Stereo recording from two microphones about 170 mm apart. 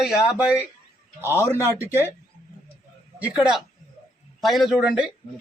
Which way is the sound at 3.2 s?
5° right (ahead or behind).